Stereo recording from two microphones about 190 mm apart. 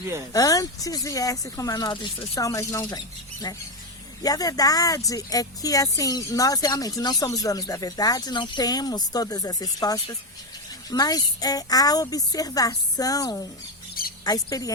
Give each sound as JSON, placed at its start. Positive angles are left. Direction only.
{"t": 0.3, "sound": "speech", "side_deg": 20}